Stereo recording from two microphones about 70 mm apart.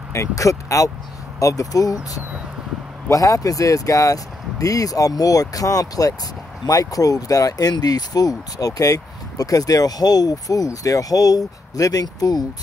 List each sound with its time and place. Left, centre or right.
0.1 s speech: left
3.1 s speech: left